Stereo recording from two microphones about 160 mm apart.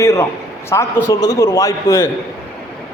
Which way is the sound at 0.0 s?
20° left (ahead or behind).